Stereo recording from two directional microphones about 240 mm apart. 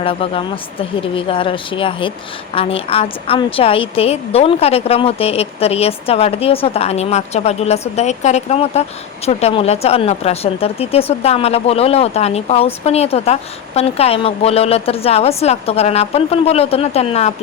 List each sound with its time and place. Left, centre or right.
0.0 s speech: left